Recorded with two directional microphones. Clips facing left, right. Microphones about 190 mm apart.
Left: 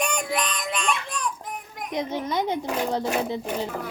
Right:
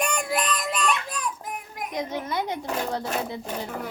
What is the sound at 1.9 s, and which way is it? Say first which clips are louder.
A child's voice: left 3 dB; 20° left (ahead or behind).